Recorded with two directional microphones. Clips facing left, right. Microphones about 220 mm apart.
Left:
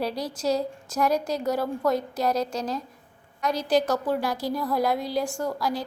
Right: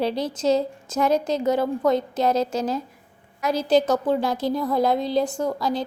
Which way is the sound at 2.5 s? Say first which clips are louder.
Right 5 dB; 5° right (ahead or behind).